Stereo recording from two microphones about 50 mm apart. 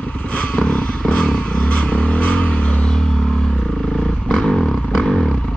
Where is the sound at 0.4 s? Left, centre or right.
Left.